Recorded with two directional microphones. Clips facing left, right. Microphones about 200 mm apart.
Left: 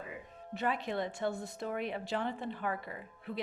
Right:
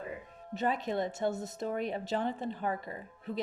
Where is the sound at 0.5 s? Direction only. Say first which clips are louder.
Right 3 dB; 40° right (ahead or behind).